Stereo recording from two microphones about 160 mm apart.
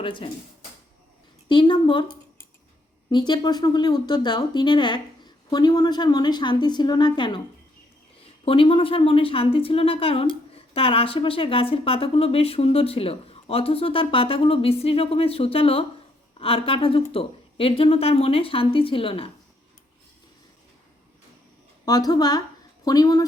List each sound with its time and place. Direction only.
0.0 s speech: 30° left (ahead or behind)
1.5 s speech: 30° left (ahead or behind)
3.1 s speech: 30° left (ahead or behind)
8.4 s speech: 35° left (ahead or behind)
21.8 s a woman's voice: 25° left (ahead or behind)